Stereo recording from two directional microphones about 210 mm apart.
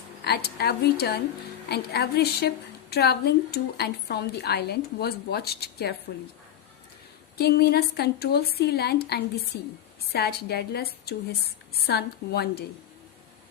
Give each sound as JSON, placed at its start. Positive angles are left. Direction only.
{"t": 0.3, "sound": "a woman's voice", "side_deg": 50}
{"t": 7.3, "sound": "a woman's voice", "side_deg": 50}